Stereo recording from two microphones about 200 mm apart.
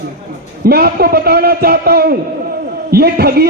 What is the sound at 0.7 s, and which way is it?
A man's voice, 50° right (ahead or behind).